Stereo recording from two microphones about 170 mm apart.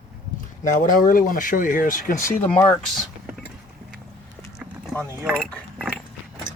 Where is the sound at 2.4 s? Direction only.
10° left (ahead or behind).